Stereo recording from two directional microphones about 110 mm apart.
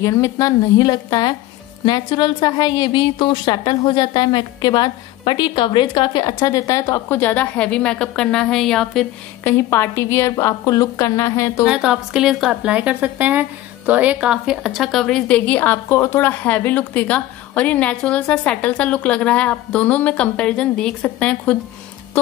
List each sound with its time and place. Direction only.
0.0 s a woman's voice: 30° left (ahead or behind)
7.2 s a woman's voice: 15° left (ahead or behind)
9.4 s a woman's voice: 20° left (ahead or behind)
11.6 s a woman's voice: 5° right (ahead or behind); by 21.5 s 10° left (ahead or behind)